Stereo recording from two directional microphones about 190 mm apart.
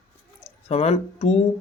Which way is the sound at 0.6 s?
35° left (ahead or behind).